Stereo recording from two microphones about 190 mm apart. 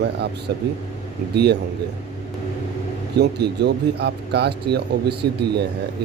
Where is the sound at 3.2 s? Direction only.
60° right (ahead or behind).